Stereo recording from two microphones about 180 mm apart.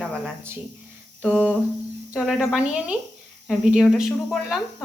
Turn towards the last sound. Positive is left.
turn(degrees=0)  # may be behind; listen again after turning